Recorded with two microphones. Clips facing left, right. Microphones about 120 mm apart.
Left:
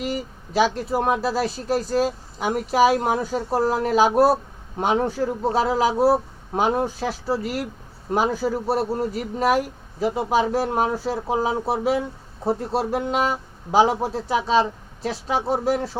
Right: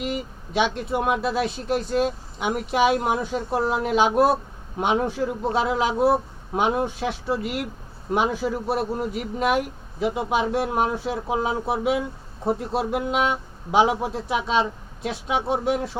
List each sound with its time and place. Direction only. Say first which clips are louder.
0.0 s speech: left 1 dB; 35° left (ahead or behind)
4.9 s speech: left 1 dB; centre (ahead or behind)
5.2 s speech: left 2 dB; 35° left (ahead or behind)